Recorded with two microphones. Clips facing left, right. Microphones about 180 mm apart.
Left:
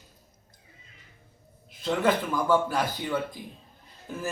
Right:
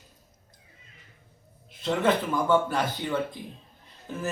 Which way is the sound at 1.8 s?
Centre (ahead or behind).